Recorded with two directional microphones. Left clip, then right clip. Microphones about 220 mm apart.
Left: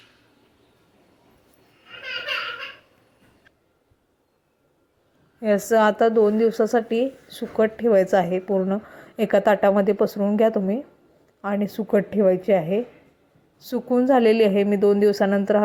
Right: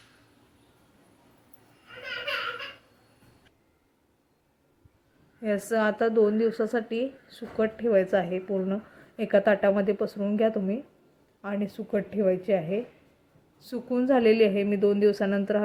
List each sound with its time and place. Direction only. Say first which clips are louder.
5.4 s a woman's voice: left 8 dB; 15° left (ahead or behind)